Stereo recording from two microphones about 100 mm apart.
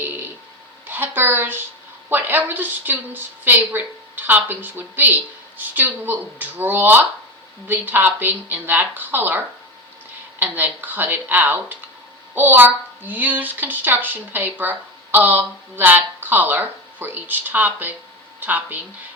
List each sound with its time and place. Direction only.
0.0 s a sound: 20° right (ahead or behind)
0.9 s a woman's voice: 20° right (ahead or behind)
10.4 s a woman's voice: 20° right (ahead or behind)